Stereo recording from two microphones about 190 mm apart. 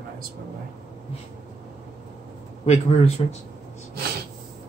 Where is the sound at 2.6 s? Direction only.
35° left (ahead or behind).